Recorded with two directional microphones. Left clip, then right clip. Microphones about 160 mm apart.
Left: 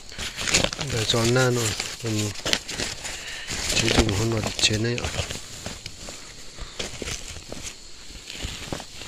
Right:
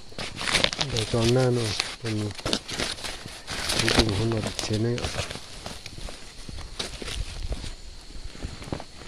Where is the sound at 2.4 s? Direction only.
25° left (ahead or behind).